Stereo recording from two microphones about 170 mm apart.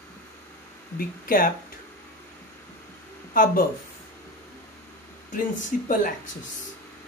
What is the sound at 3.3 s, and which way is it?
Speech, 55° left (ahead or behind).